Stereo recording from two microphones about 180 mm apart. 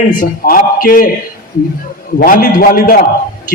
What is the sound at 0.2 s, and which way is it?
Speech, 50° left (ahead or behind).